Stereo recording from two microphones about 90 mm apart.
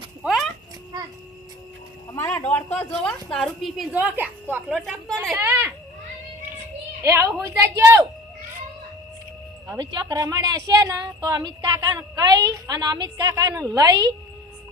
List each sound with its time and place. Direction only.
0.3 s a sound: centre (ahead or behind)
2.1 s speech: 25° left (ahead or behind)
3.2 s a woman's voice: 5° left (ahead or behind)
4.2 s a woman's voice: 20° right (ahead or behind)
4.7 s a woman's voice: 5° left (ahead or behind)
5.4 s speech: 20° right (ahead or behind)
7.0 s a woman's voice: 30° right (ahead or behind)
7.8 s a sound: 30° right (ahead or behind)
9.6 s a woman's voice: 50° right (ahead or behind)
13.3 s a woman's voice: 40° right (ahead or behind)